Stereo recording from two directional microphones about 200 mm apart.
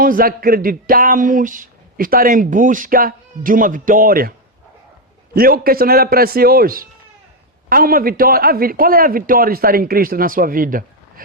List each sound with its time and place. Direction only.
0.0 s speech: 45° right (ahead or behind)